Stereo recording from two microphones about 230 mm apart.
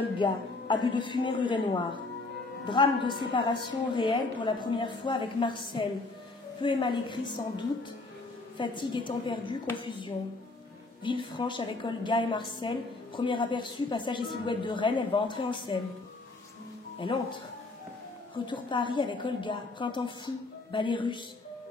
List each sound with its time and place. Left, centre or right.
0.2 s a woman's voice: centre
17.0 s a woman's voice: left
18.5 s a woman's voice: left